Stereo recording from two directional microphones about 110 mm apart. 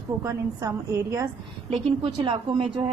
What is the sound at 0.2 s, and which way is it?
A woman's voice, 30° right (ahead or behind).